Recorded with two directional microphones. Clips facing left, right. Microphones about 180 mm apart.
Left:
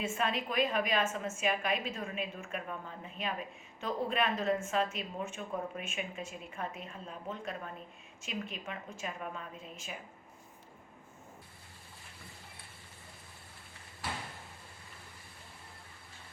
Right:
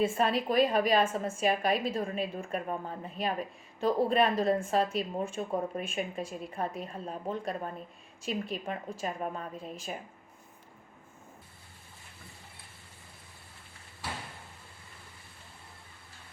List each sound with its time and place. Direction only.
0.0 s a woman's voice: 35° right (ahead or behind)